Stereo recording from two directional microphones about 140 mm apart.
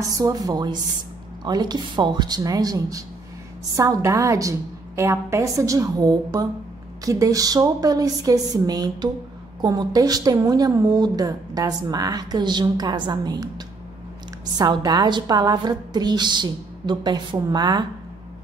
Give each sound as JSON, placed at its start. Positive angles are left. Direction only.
{"t": 0.0, "sound": "a woman's voice", "side_deg": -25}